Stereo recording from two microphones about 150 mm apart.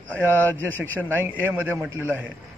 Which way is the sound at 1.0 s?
15° right (ahead or behind).